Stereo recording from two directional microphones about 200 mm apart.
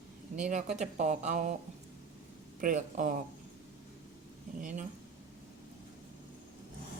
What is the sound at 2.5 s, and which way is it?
Speech, 40° right (ahead or behind).